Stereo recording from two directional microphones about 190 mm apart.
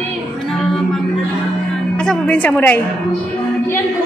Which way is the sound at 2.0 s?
5° left (ahead or behind).